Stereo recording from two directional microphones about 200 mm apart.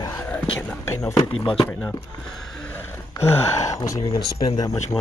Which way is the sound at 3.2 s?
35° left (ahead or behind).